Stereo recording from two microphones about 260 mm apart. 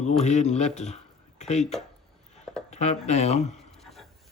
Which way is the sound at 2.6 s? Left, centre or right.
Left.